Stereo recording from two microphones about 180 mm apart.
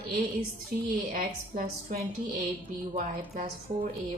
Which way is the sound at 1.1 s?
50° right (ahead or behind).